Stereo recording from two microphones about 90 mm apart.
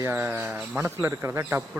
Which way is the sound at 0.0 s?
25° right (ahead or behind).